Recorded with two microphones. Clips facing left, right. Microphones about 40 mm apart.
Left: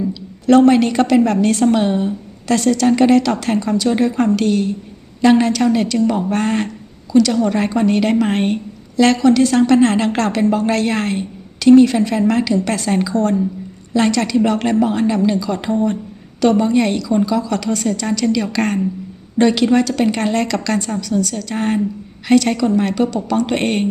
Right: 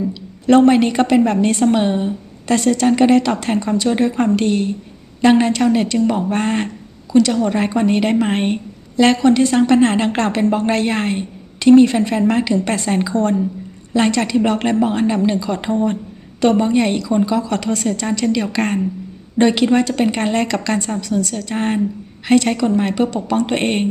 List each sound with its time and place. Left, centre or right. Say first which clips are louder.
0.1 s a woman's voice: left 1 dB; right
2.6 s a woman's voice: even; right
3.8 s a woman's voice: left 1 dB; centre